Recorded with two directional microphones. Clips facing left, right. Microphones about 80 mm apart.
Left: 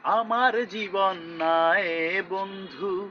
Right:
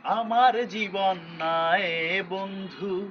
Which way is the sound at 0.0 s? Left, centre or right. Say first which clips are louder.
Right 1 dB; left.